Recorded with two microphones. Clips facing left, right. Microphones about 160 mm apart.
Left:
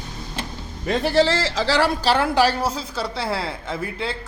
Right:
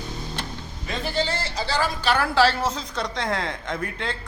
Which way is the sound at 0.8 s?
60° left (ahead or behind).